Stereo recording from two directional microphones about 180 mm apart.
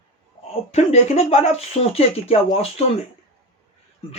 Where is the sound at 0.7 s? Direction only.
35° left (ahead or behind).